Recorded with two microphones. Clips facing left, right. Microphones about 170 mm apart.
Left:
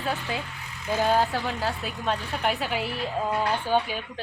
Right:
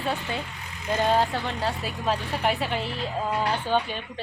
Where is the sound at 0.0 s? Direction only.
Centre (ahead or behind).